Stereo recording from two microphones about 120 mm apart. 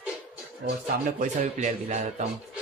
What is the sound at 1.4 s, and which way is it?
Speech, 70° right (ahead or behind).